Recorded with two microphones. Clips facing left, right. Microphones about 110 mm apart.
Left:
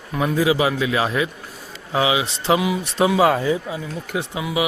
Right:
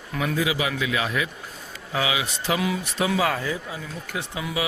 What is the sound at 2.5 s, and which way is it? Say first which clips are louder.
Speech: left 4 dB; 10° left (ahead or behind).